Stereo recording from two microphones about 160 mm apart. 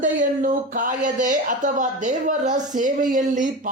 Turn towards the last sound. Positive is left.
turn(degrees=-50)  # may be behind; listen again after turning